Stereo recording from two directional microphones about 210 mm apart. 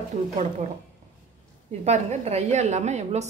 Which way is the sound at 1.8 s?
30° right (ahead or behind).